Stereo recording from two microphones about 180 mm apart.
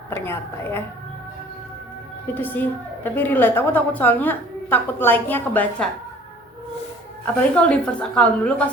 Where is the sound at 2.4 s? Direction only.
10° left (ahead or behind).